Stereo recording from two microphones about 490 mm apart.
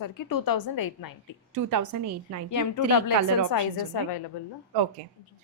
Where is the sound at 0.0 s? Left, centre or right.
Left.